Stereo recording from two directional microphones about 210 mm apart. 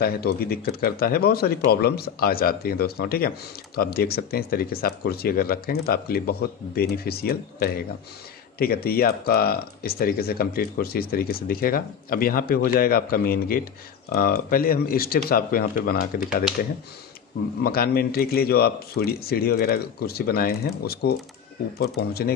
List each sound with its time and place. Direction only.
0.0 s speech: 45° left (ahead or behind)
17.6 s speech: 45° left (ahead or behind)